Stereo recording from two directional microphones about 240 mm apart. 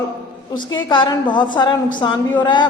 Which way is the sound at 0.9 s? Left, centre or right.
Centre.